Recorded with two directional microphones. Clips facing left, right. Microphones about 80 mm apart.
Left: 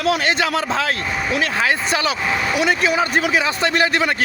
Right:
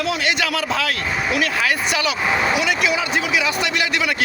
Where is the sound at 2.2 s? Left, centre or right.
Centre.